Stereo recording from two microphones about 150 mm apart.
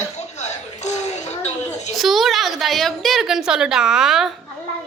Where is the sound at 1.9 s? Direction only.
Centre (ahead or behind).